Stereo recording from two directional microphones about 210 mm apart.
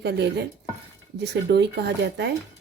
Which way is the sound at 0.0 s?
50° right (ahead or behind).